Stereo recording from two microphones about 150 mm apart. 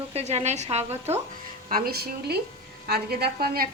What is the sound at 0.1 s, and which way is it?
Speech, 45° right (ahead or behind).